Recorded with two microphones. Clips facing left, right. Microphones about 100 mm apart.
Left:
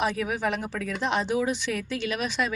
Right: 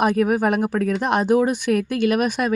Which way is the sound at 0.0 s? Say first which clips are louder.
Right 8 dB; 50° right (ahead or behind).